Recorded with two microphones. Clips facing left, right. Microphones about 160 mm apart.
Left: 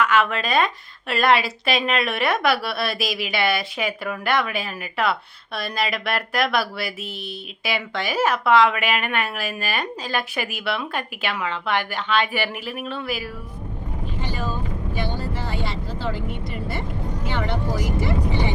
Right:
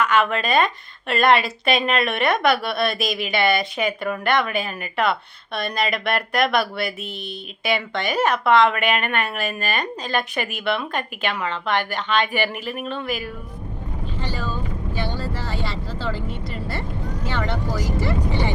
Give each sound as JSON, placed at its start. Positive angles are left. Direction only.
{"t": 0.0, "sound": "a woman's voice", "side_deg": 0}
{"t": 14.2, "sound": "vehicle", "side_deg": 15}
{"t": 15.5, "sound": "vehicle", "side_deg": 20}